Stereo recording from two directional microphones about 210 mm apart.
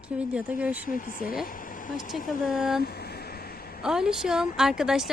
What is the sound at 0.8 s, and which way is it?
Speech, 40° left (ahead or behind).